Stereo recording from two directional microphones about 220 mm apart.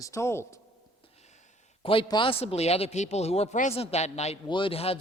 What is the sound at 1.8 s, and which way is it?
A woman's voice, 25° left (ahead or behind).